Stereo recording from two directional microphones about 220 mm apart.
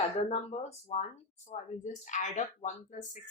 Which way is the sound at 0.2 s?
30° left (ahead or behind).